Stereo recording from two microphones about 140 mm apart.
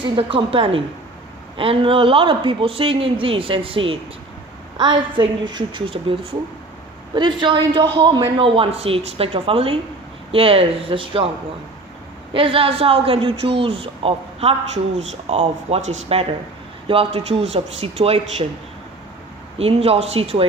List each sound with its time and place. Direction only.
0.0 s a woman's voice: 40° right (ahead or behind)
7.2 s a woman's voice: 35° right (ahead or behind)
12.3 s a woman's voice: 40° right (ahead or behind)
14.9 s speech: 50° right (ahead or behind)
19.5 s speech: 45° right (ahead or behind)